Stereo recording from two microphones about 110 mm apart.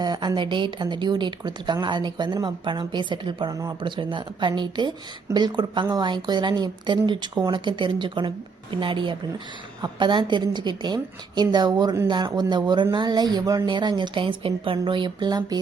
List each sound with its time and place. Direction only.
0.0 s a woman's voice: 40° right (ahead or behind)
3.5 s speech: 30° right (ahead or behind)
3.8 s a woman's voice: 45° right (ahead or behind)